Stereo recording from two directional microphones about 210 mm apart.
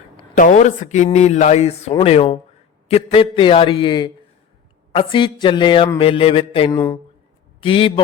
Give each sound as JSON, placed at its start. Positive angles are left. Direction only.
{"t": 0.3, "sound": "a man's voice", "side_deg": 35}
{"t": 6.7, "sound": "speech", "side_deg": 10}
{"t": 7.6, "sound": "a man's voice", "side_deg": 25}